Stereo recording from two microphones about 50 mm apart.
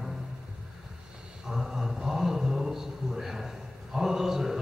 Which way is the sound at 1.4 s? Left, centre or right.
Centre.